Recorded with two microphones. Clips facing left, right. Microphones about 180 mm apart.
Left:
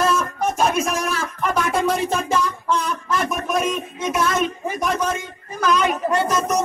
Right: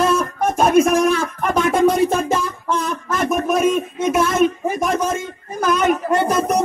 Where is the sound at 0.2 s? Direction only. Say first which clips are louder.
Right 3 dB; 50° right (ahead or behind).